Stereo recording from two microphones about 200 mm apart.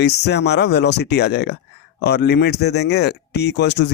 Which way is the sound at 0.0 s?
55° left (ahead or behind).